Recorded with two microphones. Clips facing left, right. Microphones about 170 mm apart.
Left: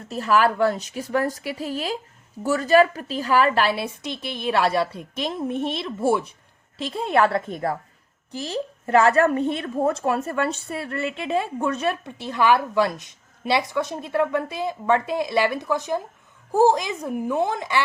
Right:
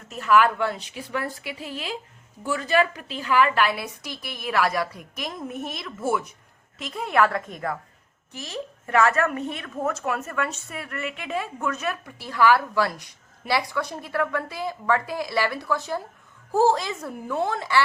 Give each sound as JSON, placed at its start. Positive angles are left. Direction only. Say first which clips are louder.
{"t": 0.1, "sound": "a woman's voice", "louder": "even", "side_deg": 35}